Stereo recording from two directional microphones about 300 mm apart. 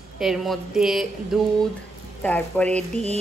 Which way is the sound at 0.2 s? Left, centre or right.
Centre.